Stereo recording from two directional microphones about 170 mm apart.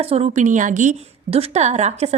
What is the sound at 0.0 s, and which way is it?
A woman's voice, 35° right (ahead or behind).